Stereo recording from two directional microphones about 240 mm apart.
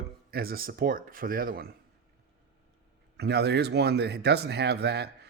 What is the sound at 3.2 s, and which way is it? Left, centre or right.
Speech, right.